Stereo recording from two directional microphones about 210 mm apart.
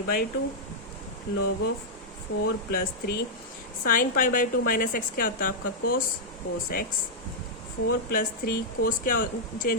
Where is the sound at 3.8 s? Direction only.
40° left (ahead or behind).